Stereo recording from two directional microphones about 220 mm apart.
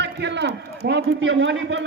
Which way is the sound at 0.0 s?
50° right (ahead or behind).